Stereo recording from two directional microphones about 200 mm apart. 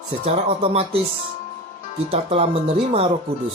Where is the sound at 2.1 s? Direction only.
30° right (ahead or behind).